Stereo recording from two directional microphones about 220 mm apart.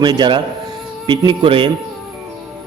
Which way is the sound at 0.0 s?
20° right (ahead or behind).